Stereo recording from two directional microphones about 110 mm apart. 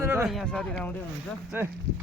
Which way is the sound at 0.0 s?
20° right (ahead or behind).